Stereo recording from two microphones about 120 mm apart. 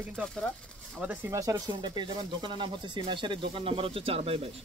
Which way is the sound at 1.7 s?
40° right (ahead or behind).